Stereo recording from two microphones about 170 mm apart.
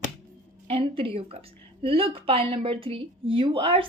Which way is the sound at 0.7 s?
35° right (ahead or behind).